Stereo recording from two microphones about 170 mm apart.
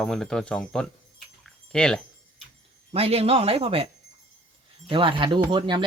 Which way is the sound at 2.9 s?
35° right (ahead or behind).